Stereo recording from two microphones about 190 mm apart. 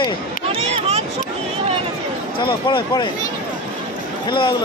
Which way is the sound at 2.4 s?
25° left (ahead or behind).